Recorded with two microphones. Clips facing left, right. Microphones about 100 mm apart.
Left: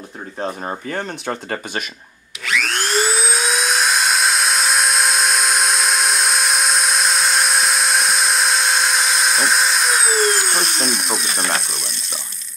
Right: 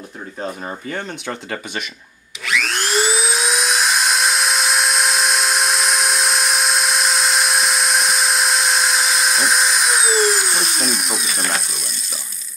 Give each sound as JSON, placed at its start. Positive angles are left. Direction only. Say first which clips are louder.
{"t": 0.4, "sound": "speech", "louder": "left 2 dB", "side_deg": 25}
{"t": 0.8, "sound": "speech", "louder": "left 1 dB", "side_deg": 40}
{"t": 2.4, "sound": "a sound", "louder": "even", "side_deg": 0}